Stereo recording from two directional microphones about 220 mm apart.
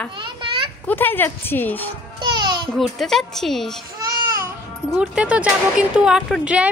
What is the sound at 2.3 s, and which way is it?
Babbling, 20° right (ahead or behind).